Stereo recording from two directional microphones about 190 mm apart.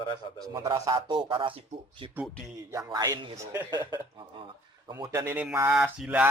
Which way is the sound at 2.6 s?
15° right (ahead or behind).